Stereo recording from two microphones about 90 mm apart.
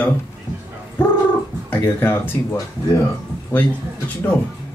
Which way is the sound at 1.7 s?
25° left (ahead or behind).